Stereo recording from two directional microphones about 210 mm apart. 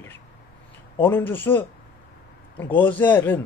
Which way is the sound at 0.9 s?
10° left (ahead or behind).